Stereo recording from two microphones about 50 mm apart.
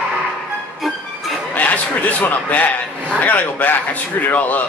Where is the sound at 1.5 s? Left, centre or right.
Left.